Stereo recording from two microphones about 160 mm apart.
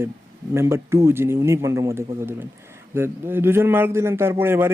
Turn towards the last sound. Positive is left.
turn(degrees=-15)  # may be behind; listen again after turning